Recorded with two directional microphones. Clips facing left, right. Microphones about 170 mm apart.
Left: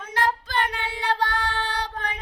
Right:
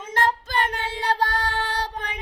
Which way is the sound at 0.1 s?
45° right (ahead or behind).